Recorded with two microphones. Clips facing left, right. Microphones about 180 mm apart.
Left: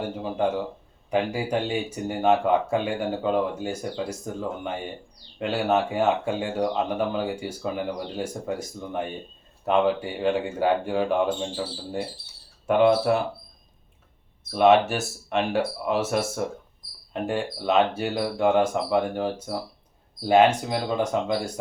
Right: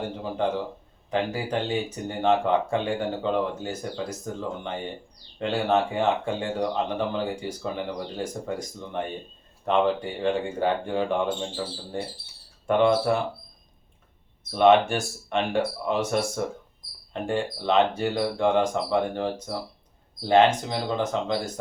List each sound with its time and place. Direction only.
1.1 s speech: 10° left (ahead or behind)
14.5 s speech: 5° left (ahead or behind)